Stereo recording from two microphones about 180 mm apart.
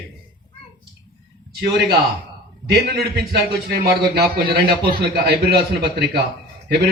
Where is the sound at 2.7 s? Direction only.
65° right (ahead or behind).